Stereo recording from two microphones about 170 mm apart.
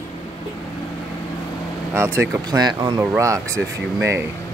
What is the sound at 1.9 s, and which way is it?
Speech, 15° right (ahead or behind).